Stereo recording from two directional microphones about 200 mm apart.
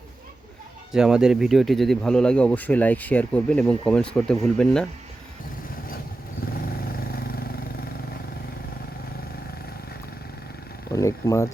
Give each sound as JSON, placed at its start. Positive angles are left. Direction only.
{"t": 0.9, "sound": "speech", "side_deg": -5}
{"t": 6.5, "sound": "vehicle", "side_deg": 50}
{"t": 10.9, "sound": "a sound", "side_deg": 15}